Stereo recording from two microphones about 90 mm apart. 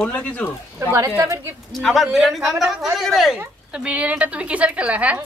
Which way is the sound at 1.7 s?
Centre (ahead or behind).